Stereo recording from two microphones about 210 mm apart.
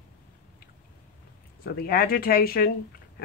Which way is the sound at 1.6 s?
45° left (ahead or behind).